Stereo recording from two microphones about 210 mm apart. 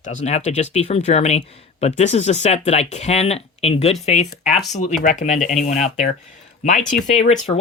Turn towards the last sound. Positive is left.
turn(degrees=30)  # may be behind; listen again after turning